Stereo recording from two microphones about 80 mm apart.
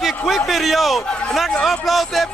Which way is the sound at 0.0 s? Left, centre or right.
Centre.